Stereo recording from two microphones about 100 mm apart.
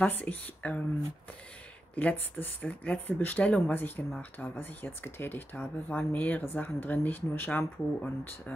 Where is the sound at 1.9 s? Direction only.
20° left (ahead or behind).